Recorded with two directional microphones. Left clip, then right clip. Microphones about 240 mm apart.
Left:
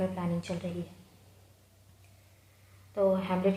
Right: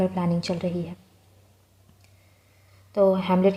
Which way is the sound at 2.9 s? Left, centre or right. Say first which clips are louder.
Right 7 dB; right.